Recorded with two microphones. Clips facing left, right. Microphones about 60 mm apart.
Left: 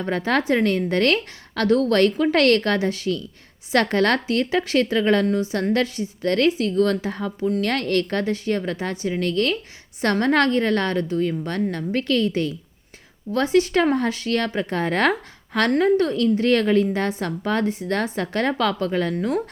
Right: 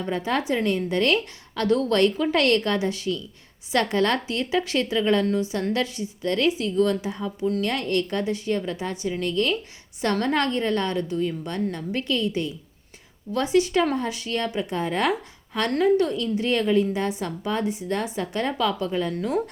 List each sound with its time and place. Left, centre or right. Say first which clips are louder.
0.0 s a woman's voice: left 3 dB; left
6.6 s a woman's voice: left 2 dB; left
7.3 s a woman's voice: left 2 dB; left
7.6 s a woman's voice: left 3 dB; left
13.3 s a woman's voice: left 2 dB; left
15.7 s a woman's voice: left 1 dB; left
19.1 s speech: left 3 dB; left